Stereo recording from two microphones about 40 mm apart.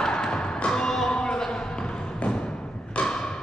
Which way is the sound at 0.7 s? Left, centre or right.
Centre.